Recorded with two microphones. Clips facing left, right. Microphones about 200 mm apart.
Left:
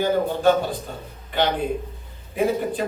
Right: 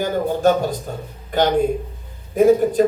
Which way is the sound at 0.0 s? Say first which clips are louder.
Right 1 dB; 45° right (ahead or behind).